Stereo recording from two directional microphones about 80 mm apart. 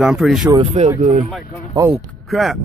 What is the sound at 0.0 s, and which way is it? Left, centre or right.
Speech, centre.